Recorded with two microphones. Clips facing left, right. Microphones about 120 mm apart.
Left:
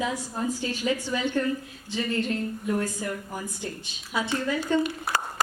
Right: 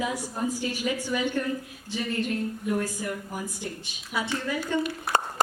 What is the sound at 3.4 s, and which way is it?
Speech, 15° right (ahead or behind).